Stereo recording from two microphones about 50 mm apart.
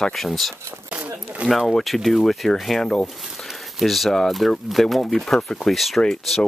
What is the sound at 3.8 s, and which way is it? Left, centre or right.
Speech, centre.